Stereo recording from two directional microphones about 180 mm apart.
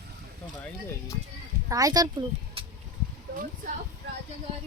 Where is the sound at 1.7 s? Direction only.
20° right (ahead or behind).